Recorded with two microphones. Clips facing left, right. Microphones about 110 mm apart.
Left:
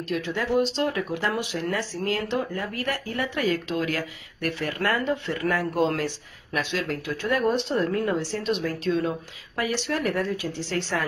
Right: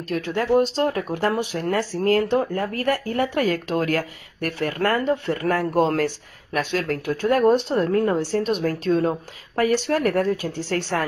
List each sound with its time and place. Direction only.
0.1 s speech: 45° right (ahead or behind)